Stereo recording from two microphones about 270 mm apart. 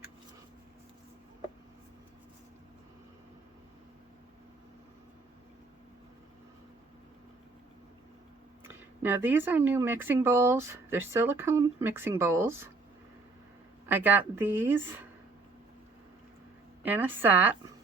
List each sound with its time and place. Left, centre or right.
8.6 s speech: centre
13.8 s speech: centre
16.8 s speech: centre